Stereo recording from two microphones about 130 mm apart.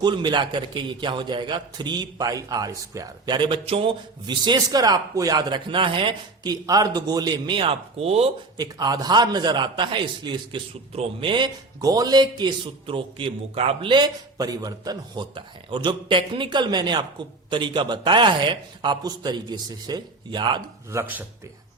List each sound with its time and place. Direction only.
0.0 s a man's voice: 35° right (ahead or behind); by 8.3 s 50° right (ahead or behind)
8.5 s a man's voice: 30° right (ahead or behind)
20.9 s speech: 15° right (ahead or behind)